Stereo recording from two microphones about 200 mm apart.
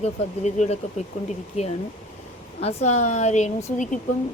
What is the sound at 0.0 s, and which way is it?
Speech, 35° left (ahead or behind).